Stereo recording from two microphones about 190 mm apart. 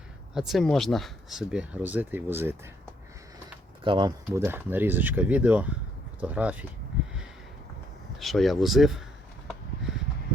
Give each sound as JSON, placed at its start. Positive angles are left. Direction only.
{"t": 0.3, "sound": "speech", "side_deg": 0}
{"t": 3.8, "sound": "speech", "side_deg": -25}
{"t": 4.3, "sound": "speech", "side_deg": -10}
{"t": 8.2, "sound": "speech", "side_deg": 0}